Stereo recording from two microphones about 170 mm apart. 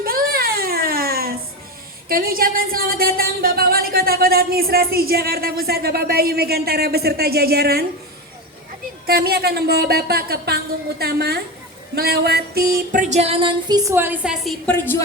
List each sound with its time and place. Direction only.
0.0 s a sound: 60° right (ahead or behind)
2.0 s a woman's voice: 60° right (ahead or behind)
9.0 s a woman's voice: 65° right (ahead or behind)
11.9 s music: 65° right (ahead or behind); by 14.3 s 10° right (ahead or behind)
14.4 s speech: 5° left (ahead or behind)